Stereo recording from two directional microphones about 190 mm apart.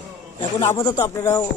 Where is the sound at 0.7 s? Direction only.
20° left (ahead or behind).